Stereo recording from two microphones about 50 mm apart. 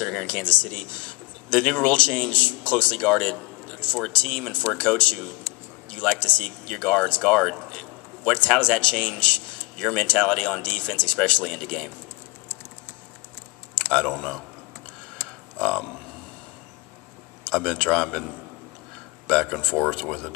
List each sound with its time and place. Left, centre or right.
0.0 s speech: centre
6.1 s speech: left
7.2 s a sound: centre
8.4 s speech: left
13.9 s speech: centre
15.5 s speech: centre
17.5 s speech: centre